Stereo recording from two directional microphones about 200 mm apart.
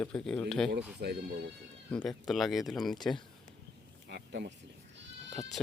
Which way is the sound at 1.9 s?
5° left (ahead or behind).